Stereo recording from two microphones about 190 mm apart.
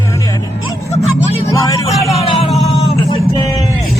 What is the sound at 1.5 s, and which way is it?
Vehicle, 15° left (ahead or behind).